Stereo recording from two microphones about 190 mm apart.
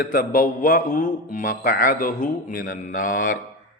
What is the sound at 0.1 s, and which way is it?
A man's voice, 45° left (ahead or behind).